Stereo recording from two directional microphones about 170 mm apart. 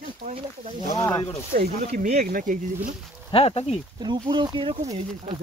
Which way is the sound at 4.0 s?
25° right (ahead or behind).